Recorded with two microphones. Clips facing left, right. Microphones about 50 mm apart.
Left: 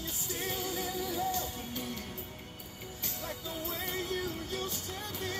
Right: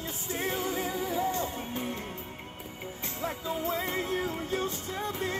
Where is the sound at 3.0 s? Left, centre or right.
Right.